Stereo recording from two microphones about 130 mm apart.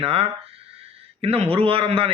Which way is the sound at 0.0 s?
45° right (ahead or behind).